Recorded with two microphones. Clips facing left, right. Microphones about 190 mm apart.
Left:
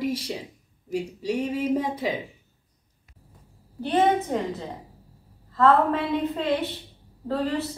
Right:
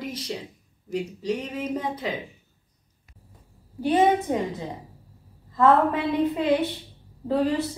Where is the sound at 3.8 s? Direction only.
10° right (ahead or behind).